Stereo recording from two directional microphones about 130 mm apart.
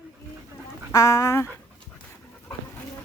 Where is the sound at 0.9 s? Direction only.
25° left (ahead or behind).